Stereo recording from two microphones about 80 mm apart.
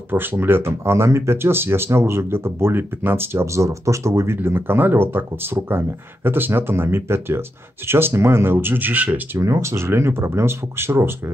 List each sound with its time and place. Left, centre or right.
0.1 s speech: right
9.4 s speech: right